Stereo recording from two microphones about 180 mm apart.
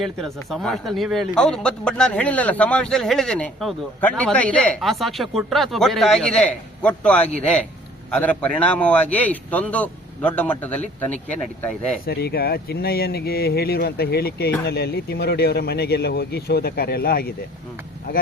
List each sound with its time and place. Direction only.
0.0 s a man's voice: centre (ahead or behind)
12.0 s speech: 60° left (ahead or behind)